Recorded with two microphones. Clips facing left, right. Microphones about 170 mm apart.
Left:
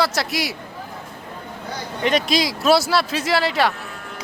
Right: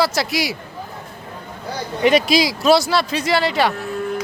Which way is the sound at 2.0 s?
5° right (ahead or behind).